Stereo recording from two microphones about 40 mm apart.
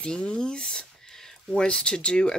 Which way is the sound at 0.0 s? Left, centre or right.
Left.